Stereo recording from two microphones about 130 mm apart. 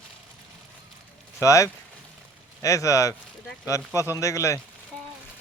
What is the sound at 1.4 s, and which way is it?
Speech, 25° left (ahead or behind).